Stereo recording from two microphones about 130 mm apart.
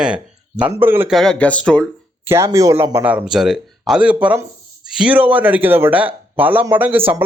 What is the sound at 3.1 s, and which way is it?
Speech, 10° right (ahead or behind).